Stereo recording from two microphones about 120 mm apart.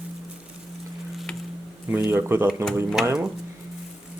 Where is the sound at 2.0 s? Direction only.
20° right (ahead or behind).